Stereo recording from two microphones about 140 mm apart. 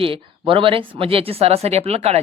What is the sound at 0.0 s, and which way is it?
Speech, 40° right (ahead or behind).